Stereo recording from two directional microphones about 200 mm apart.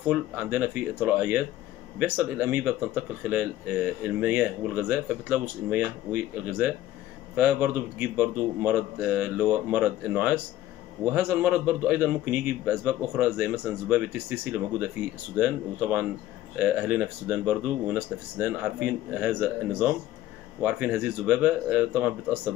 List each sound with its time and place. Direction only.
0.1 s speech: 5° right (ahead or behind)
20.6 s speech: 10° right (ahead or behind)